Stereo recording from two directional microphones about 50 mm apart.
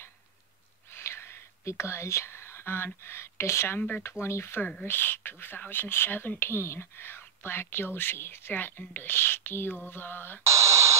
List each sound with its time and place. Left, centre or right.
0.9 s a sound: left
1.6 s speech: left
4.8 s speech: left
6.5 s speech: left
10.4 s speech: right